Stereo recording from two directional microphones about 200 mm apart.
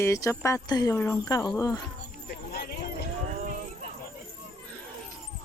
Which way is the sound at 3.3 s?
40° right (ahead or behind).